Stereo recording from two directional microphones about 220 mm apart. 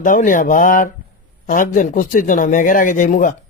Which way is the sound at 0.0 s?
35° left (ahead or behind).